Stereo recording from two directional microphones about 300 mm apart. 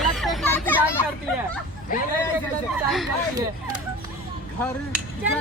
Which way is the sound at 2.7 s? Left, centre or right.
Centre.